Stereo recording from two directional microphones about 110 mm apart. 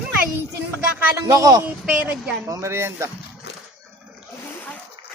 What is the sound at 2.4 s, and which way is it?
Speech, 25° right (ahead or behind).